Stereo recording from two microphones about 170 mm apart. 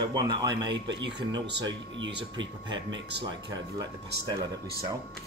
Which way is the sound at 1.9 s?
90° right.